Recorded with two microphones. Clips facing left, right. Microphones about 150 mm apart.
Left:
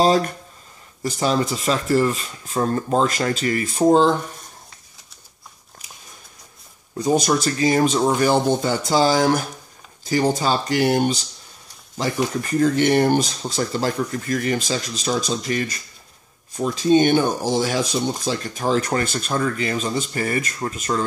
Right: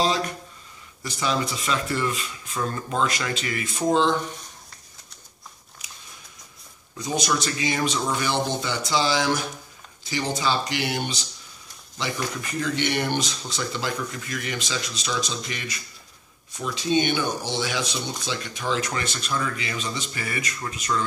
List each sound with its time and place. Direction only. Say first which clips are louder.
0.0 s speech: left 7 dB; 45° left (ahead or behind)
7.0 s speech: left 7 dB; 45° left (ahead or behind)
12.4 s speech: left 11 dB; 45° left (ahead or behind)